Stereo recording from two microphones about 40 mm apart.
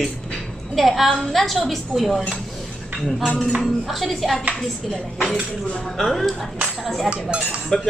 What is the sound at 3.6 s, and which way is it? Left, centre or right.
A man's voice, centre.